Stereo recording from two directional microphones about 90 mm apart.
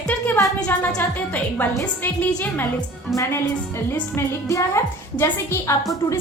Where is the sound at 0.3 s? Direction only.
35° left (ahead or behind).